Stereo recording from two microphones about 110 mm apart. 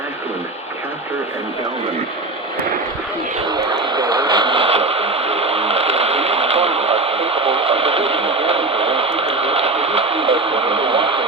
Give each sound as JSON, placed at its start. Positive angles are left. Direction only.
{"t": 3.5, "sound": "radio", "side_deg": -40}